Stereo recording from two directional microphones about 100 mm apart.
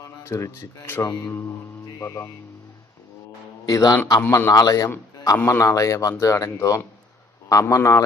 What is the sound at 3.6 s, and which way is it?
Speech, 35° left (ahead or behind).